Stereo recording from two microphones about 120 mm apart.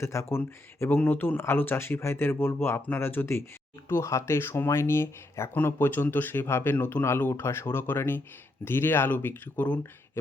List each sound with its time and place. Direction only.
0.0 s speech: 20° left (ahead or behind)